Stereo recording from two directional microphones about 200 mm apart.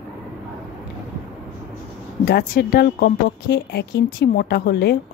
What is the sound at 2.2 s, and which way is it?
Speech, 50° left (ahead or behind).